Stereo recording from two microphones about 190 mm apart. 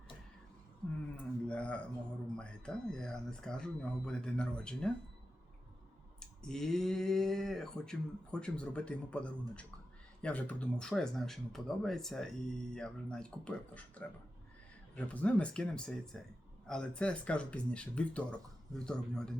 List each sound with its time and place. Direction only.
1.1 s speech: 5° left (ahead or behind)
6.1 s speech: 5° left (ahead or behind)
14.9 s speech: 5° left (ahead or behind)